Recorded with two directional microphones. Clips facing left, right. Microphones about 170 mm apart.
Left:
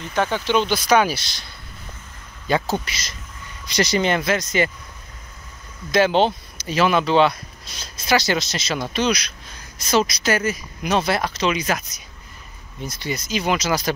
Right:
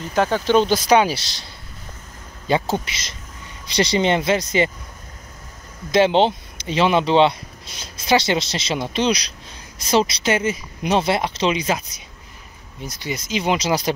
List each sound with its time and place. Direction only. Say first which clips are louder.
0.3 s speech: right 5 dB; 40° right (ahead or behind)
0.9 s speech: even; 30° right (ahead or behind)
5.9 s speech: right 2 dB; 25° right (ahead or behind)
12.8 s speech: left 1 dB; 15° right (ahead or behind)